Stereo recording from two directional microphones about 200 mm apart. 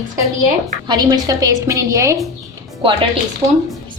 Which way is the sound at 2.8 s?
25° right (ahead or behind).